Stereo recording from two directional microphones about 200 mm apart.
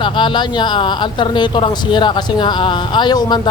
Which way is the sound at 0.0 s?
25° left (ahead or behind).